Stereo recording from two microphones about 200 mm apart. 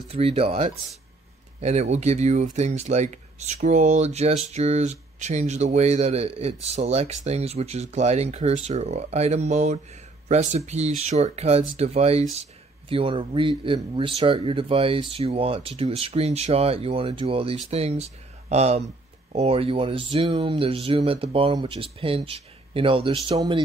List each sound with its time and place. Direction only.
0.1 s speech: 30° right (ahead or behind)